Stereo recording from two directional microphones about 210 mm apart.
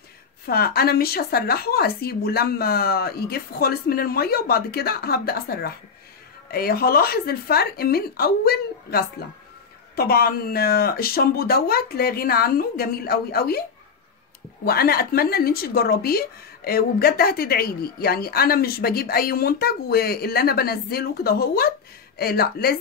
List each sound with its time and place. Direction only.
0.5 s a woman's voice: 45° left (ahead or behind)